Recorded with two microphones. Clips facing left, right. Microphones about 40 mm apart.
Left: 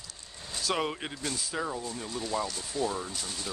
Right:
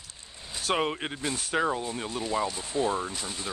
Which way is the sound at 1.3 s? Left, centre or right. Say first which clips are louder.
Right 8 dB; right.